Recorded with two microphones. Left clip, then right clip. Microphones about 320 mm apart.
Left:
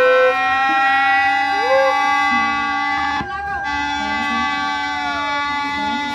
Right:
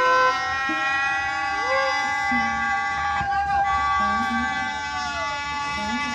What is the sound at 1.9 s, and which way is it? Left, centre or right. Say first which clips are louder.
Music: left 7 dB; left.